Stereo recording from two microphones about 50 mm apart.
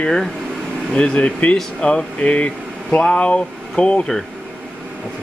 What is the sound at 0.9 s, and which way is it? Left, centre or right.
Speech, left.